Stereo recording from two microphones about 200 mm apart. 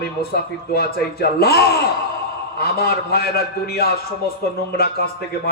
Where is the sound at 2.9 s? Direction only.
50° left (ahead or behind).